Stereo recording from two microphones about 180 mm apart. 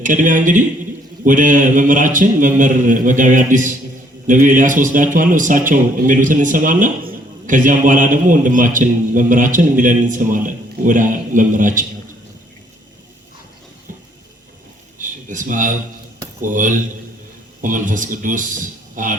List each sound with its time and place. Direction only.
0.0 s a man's voice: 45° right (ahead or behind)
14.9 s a sound: 45° right (ahead or behind)
16.4 s a man's voice: 45° right (ahead or behind)